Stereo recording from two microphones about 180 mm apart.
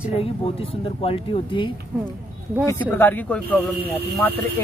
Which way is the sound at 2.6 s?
15° left (ahead or behind).